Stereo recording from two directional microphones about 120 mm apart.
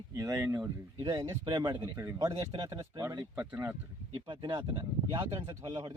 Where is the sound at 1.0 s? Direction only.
35° right (ahead or behind).